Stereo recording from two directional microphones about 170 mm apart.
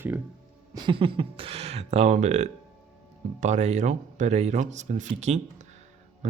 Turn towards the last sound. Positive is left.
turn(degrees=-40)  # may be behind; listen again after turning